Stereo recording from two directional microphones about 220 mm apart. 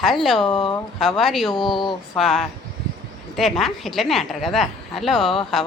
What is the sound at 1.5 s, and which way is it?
Speech, 20° left (ahead or behind).